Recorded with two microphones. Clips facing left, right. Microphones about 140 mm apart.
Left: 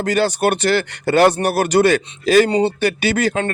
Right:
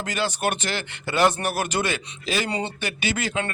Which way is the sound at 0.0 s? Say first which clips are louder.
Left 9 dB; 40° left (ahead or behind).